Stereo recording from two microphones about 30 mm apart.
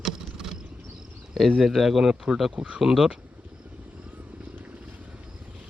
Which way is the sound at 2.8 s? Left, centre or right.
Centre.